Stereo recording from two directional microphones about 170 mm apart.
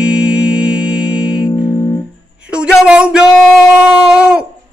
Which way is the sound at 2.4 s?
5° right (ahead or behind).